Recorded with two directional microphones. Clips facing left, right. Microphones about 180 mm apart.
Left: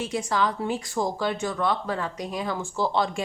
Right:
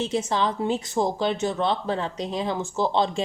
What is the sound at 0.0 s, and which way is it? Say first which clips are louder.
Speech: right 2 dB; 25° right (ahead or behind).